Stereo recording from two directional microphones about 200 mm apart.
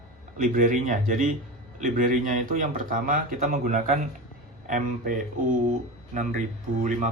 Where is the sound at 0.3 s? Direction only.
40° right (ahead or behind).